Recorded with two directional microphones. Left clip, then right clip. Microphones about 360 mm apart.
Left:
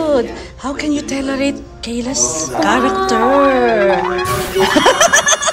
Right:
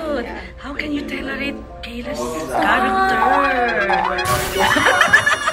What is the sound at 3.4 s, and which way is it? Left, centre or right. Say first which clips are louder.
Music: left 6 dB; centre.